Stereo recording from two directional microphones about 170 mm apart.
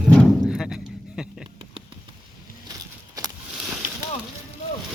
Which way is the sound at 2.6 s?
20° right (ahead or behind).